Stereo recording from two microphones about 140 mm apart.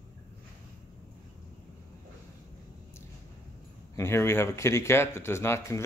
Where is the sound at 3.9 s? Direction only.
20° left (ahead or behind).